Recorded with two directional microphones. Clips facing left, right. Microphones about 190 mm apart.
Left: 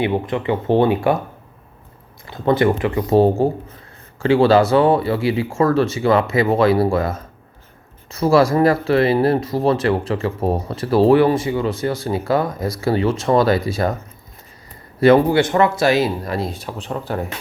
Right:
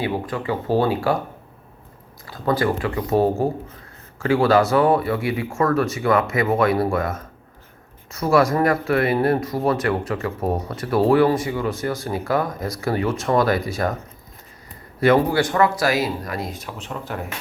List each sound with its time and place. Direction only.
0.0 s speech: 20° left (ahead or behind)
2.2 s speech: 25° left (ahead or behind)
15.0 s speech: 25° left (ahead or behind)